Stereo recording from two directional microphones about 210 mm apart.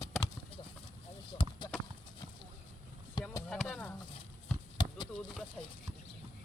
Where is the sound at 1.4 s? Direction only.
20° left (ahead or behind).